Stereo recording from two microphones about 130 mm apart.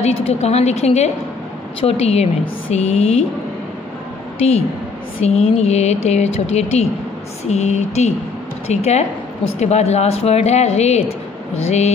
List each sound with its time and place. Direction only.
0.0 s speech: 55° left (ahead or behind)
5.2 s speech: 55° left (ahead or behind)